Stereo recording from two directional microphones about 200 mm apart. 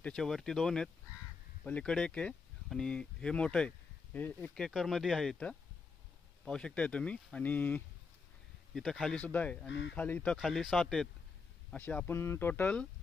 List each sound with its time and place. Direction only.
0.0 s speech: 5° left (ahead or behind)
9.7 s speech: 60° left (ahead or behind)
9.9 s speech: 5° left (ahead or behind)